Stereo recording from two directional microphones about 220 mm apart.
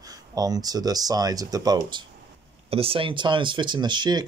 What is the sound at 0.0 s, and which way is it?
Speech, 15° right (ahead or behind).